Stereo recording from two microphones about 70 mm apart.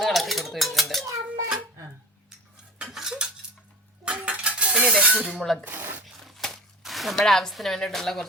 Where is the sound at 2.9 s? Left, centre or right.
Centre.